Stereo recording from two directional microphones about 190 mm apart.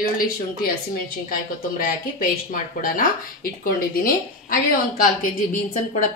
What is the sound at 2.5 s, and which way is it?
A woman's voice, 50° left (ahead or behind).